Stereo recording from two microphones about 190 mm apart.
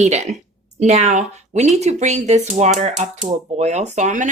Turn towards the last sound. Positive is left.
turn(degrees=-40)  # may be behind; listen again after turning